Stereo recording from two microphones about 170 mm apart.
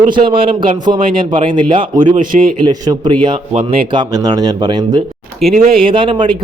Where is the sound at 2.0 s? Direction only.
50° right (ahead or behind).